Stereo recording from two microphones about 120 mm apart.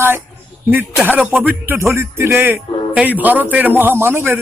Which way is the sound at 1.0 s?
15° right (ahead or behind).